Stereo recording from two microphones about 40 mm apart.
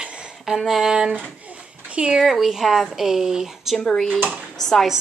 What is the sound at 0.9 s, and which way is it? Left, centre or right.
Speech, right.